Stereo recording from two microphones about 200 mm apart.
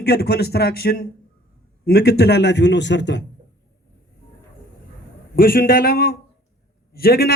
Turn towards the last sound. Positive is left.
turn(degrees=50)  # may be behind; listen again after turning